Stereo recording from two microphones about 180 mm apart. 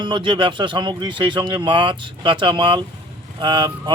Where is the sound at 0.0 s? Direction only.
25° right (ahead or behind).